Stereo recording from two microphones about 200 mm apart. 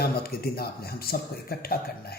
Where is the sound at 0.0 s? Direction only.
50° left (ahead or behind).